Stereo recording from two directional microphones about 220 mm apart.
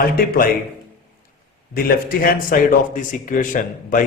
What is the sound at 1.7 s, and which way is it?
A man's voice, 40° left (ahead or behind).